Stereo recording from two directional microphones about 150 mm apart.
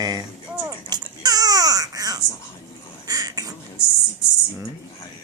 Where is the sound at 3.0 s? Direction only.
25° right (ahead or behind).